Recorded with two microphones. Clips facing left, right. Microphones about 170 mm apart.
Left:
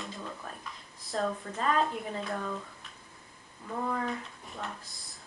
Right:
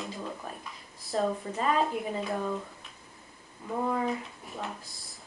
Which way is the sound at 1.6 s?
5° right (ahead or behind).